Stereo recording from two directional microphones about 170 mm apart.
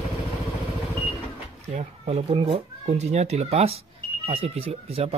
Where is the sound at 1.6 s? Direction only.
40° right (ahead or behind).